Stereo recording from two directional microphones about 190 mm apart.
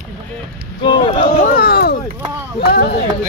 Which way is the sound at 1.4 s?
50° left (ahead or behind).